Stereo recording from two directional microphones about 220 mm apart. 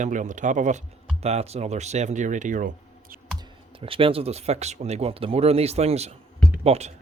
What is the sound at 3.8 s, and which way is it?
Speech, 25° right (ahead or behind).